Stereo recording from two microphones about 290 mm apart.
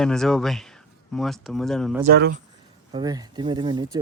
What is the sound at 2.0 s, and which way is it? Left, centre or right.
Speech, right.